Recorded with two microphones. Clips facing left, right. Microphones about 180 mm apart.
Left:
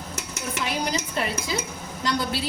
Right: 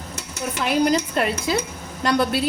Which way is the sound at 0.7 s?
60° right (ahead or behind).